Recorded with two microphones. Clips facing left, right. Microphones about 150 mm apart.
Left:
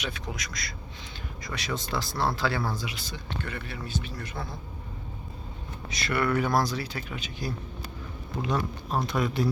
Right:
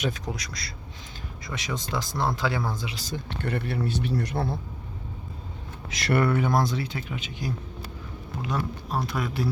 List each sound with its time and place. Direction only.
0.0 s speech: 35° right (ahead or behind)
1.5 s speech: 20° right (ahead or behind)
2.9 s speech: 40° right (ahead or behind)
3.2 s a man's voice: 60° right (ahead or behind)
6.1 s speech: 30° right (ahead or behind)
8.4 s speech: 5° right (ahead or behind)